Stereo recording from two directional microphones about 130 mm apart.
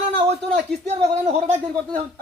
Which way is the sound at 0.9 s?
55° right (ahead or behind).